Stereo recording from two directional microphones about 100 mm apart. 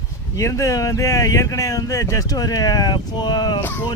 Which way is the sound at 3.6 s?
20° left (ahead or behind).